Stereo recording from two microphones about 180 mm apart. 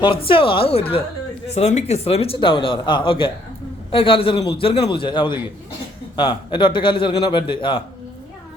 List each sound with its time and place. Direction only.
0.3 s a woman's voice: 30° left (ahead or behind)